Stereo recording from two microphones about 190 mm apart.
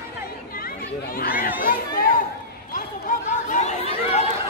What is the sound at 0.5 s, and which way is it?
Chatter, 50° left (ahead or behind).